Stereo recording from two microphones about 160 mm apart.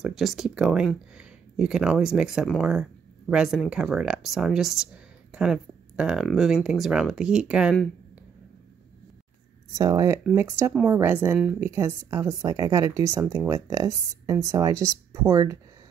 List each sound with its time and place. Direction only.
0.0 s speech: centre (ahead or behind)
9.8 s speech: 20° right (ahead or behind)